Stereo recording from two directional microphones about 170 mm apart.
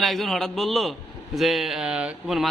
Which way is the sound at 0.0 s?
Centre (ahead or behind).